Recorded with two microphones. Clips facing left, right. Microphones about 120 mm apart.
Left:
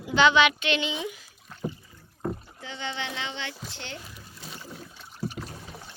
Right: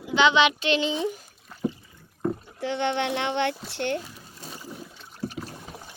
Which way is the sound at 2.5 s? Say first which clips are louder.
Right 9 dB; 65° right (ahead or behind).